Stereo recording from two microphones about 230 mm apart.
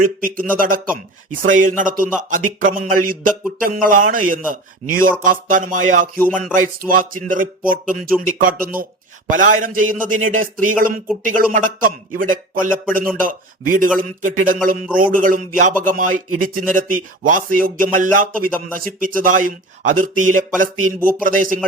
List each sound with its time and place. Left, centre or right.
0.0 s speech: right